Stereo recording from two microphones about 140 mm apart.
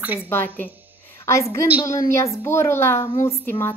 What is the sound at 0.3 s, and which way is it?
A woman's voice, 15° left (ahead or behind).